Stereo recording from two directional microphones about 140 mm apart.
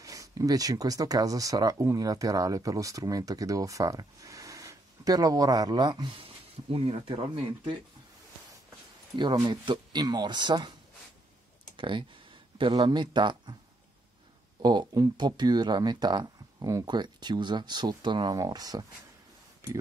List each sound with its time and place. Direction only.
0.0 s speech: 25° right (ahead or behind); by 7.7 s 45° right (ahead or behind)
9.2 s speech: 30° right (ahead or behind)
11.7 s speech: 35° right (ahead or behind)
14.6 s speech: 30° right (ahead or behind)